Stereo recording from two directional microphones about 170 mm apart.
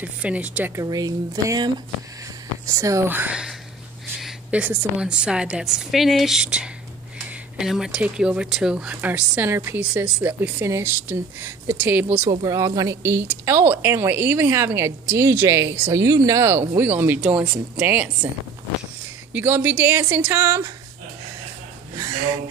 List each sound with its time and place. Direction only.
0.0 s speech: 10° right (ahead or behind)
0.8 s a woman's voice: 20° right (ahead or behind)
19.3 s speech: 10° right (ahead or behind)